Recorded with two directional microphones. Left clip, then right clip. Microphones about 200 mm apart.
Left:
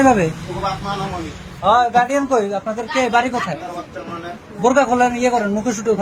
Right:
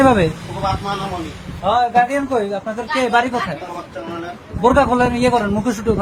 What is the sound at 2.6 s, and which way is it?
Speech, 5° right (ahead or behind).